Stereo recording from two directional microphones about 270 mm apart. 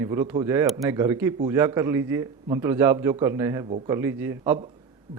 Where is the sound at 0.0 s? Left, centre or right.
Centre.